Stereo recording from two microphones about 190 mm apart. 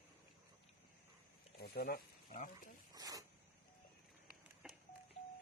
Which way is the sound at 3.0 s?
20° right (ahead or behind).